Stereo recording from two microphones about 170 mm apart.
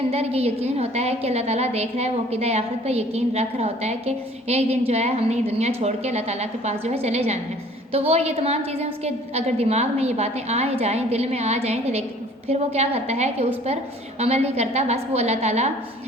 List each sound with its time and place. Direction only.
0.1 s a woman's voice: 35° right (ahead or behind)